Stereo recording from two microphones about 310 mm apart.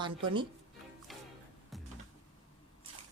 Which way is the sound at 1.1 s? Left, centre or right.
Centre.